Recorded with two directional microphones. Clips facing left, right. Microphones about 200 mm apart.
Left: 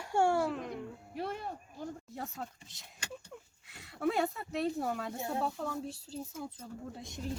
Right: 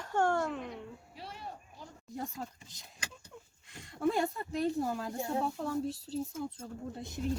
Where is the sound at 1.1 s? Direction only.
55° left (ahead or behind).